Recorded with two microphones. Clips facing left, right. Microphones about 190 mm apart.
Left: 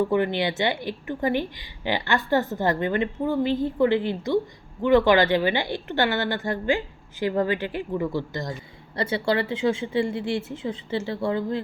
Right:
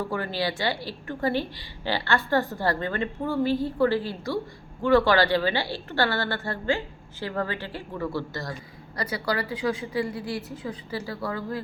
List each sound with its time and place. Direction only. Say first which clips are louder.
0.1 s a woman's voice: left 5 dB; 20° left (ahead or behind)